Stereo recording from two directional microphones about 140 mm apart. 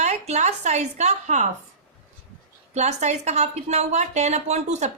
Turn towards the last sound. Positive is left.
turn(degrees=-55)  # may be behind; listen again after turning